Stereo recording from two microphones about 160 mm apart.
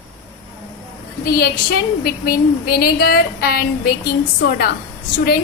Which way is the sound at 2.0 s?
70° left (ahead or behind).